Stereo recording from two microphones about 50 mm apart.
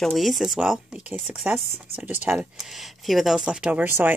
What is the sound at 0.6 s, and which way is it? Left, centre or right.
Speech, centre.